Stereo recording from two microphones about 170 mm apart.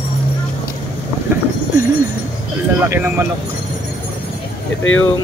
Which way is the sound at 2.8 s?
10° right (ahead or behind).